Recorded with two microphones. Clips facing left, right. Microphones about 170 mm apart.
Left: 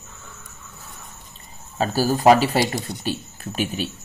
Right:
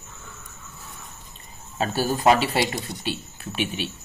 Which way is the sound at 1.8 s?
40° left (ahead or behind).